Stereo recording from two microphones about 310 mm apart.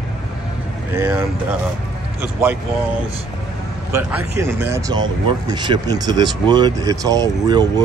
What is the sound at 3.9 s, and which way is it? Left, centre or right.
Speech, centre.